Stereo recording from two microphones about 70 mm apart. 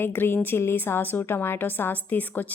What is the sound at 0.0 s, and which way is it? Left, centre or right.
A woman's voice, left.